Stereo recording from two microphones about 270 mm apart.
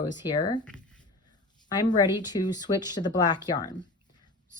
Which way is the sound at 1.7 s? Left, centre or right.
Centre.